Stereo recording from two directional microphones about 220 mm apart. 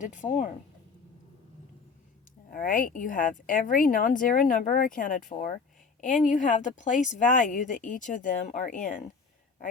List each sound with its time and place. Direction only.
0.0 s speech: 35° left (ahead or behind)
2.5 s speech: 40° left (ahead or behind)